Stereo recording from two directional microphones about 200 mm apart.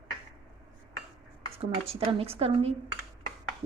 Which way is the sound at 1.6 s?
30° right (ahead or behind).